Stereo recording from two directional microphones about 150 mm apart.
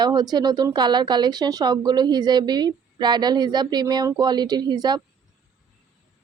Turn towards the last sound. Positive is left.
turn(degrees=-25)  # may be behind; listen again after turning